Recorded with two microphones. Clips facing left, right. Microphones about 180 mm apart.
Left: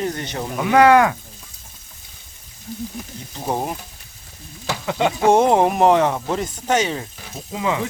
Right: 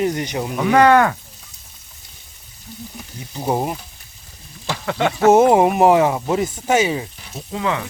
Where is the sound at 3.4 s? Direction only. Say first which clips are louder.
Right 3 dB; 5° right (ahead or behind).